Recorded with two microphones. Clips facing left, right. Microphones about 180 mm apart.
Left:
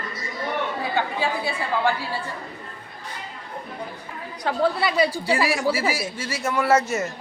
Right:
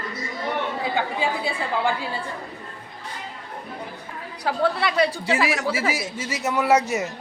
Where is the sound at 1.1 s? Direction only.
15° right (ahead or behind).